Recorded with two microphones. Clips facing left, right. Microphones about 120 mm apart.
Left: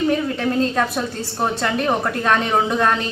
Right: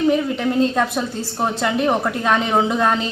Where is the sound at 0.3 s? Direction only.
10° right (ahead or behind).